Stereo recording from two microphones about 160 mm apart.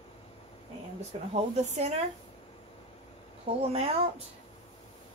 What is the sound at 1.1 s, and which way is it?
Speech, 45° right (ahead or behind).